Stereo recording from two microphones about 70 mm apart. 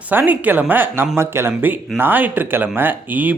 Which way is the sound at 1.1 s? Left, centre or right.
Right.